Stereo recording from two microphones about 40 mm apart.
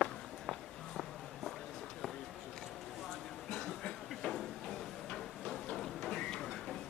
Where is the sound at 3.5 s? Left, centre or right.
Centre.